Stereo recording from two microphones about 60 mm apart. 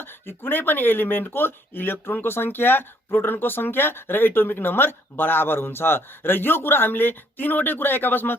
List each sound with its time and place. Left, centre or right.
0.0 s speech: left